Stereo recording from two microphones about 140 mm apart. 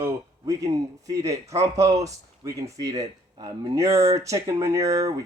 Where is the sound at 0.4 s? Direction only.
25° right (ahead or behind).